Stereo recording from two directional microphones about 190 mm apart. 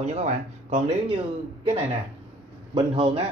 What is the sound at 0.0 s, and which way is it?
Speech, 35° right (ahead or behind).